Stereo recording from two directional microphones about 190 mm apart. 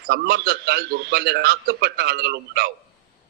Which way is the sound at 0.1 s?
55° right (ahead or behind).